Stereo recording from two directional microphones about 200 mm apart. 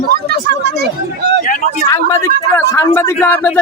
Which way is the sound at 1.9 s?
15° left (ahead or behind).